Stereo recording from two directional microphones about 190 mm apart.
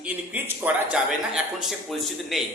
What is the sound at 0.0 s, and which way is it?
A man's voice, 10° right (ahead or behind).